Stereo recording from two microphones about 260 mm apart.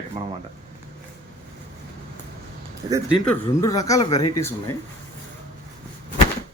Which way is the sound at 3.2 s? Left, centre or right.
Centre.